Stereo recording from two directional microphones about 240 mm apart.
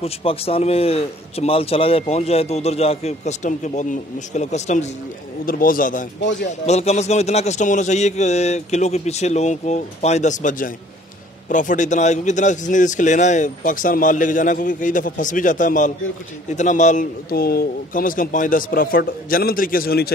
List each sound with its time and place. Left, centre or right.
0.0 s a man's voice: left
6.2 s a man's voice: left
6.6 s a man's voice: left